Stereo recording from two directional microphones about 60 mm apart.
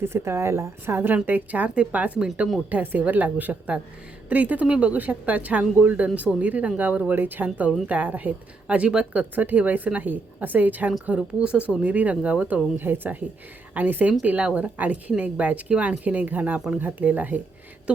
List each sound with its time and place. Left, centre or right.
0.0 s a woman's voice: right
1.0 s a woman's voice: right
9.3 s a woman's voice: right
12.7 s a woman's voice: right